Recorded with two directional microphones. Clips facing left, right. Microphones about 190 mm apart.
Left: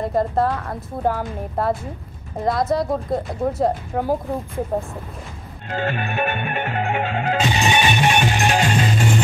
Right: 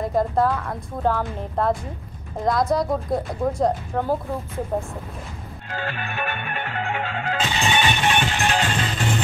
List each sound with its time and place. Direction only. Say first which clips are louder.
0.1 s a woman's voice: right 1 dB; centre (ahead or behind)
5.7 s music: left 6 dB; 20° left (ahead or behind)